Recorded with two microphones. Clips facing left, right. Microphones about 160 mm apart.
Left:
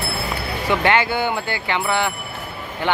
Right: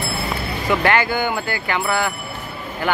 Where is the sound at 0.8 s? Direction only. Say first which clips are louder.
Left 1 dB; 25° left (ahead or behind).